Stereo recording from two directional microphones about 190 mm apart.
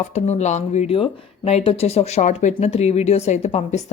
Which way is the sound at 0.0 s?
35° left (ahead or behind).